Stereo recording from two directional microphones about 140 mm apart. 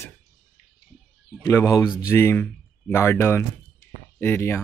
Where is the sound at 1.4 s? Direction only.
20° left (ahead or behind).